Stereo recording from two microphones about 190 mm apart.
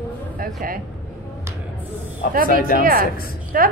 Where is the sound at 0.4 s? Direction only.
50° right (ahead or behind).